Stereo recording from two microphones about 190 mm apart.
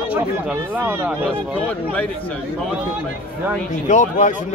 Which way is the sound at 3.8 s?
40° left (ahead or behind).